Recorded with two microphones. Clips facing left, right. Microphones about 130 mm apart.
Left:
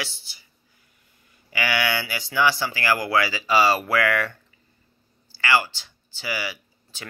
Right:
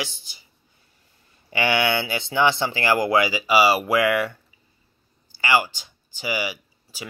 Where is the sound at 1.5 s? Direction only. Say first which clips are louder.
Right 4 dB; 25° right (ahead or behind).